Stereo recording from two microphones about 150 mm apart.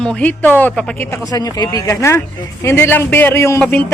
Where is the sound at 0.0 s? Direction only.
5° left (ahead or behind).